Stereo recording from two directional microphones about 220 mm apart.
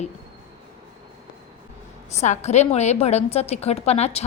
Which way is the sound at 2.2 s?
30° left (ahead or behind).